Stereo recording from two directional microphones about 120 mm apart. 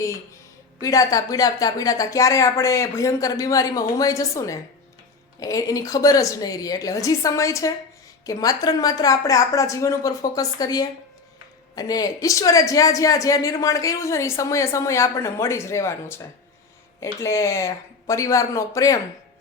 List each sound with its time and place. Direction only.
0.8 s a woman's voice: 30° left (ahead or behind)